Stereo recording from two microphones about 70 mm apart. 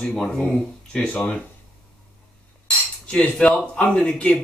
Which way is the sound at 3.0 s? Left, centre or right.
Centre.